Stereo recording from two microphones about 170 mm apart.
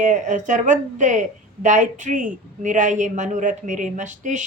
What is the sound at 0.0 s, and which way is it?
A woman's voice, 45° right (ahead or behind).